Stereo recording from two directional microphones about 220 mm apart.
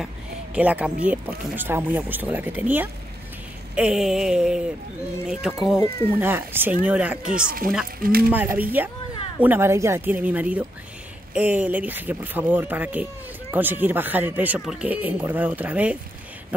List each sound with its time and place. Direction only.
0.6 s speech: 5° right (ahead or behind)
3.7 s a sound: 5° right (ahead or behind)
6.1 s speech: 10° right (ahead or behind)
6.8 s a sound: 5° right (ahead or behind)
8.0 s speech: 40° right (ahead or behind)
8.3 s speech: 10° right (ahead or behind)